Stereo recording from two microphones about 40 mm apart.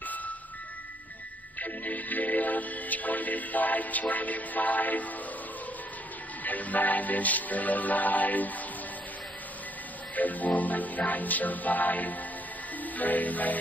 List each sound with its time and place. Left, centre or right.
1.6 s music: left
6.4 s music: left
10.1 s music: left